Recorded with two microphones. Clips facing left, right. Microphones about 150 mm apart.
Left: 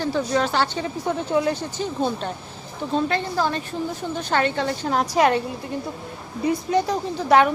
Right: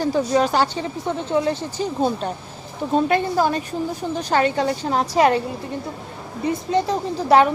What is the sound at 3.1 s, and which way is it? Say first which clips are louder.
A woman's voice: right 4 dB; 15° right (ahead or behind).